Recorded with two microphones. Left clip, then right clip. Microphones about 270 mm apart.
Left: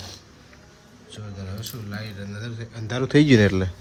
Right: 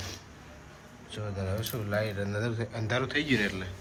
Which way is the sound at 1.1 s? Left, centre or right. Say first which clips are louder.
Right 4 dB; centre.